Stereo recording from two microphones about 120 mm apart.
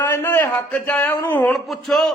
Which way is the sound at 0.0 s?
20° left (ahead or behind).